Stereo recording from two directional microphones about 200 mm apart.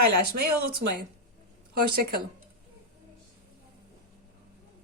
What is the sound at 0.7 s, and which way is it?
Speech, 50° right (ahead or behind).